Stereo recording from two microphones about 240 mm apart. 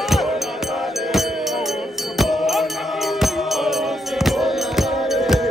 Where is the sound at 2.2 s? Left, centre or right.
Centre.